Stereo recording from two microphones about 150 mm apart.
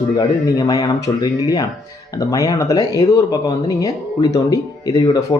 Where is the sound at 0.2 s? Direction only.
25° left (ahead or behind).